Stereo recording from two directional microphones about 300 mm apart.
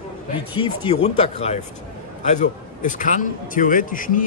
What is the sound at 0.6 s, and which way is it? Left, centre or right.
A man's voice, centre.